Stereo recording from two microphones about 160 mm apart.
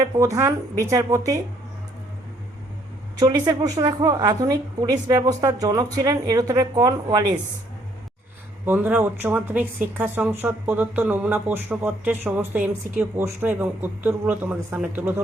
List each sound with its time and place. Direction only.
0.0 s a woman's voice: 20° right (ahead or behind)
3.2 s a woman's voice: 25° right (ahead or behind)
8.6 s speech: 10° right (ahead or behind)